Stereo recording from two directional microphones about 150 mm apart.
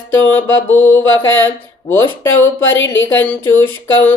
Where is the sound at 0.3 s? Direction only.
15° left (ahead or behind).